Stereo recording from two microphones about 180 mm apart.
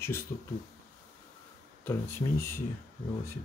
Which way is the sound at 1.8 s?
15° left (ahead or behind).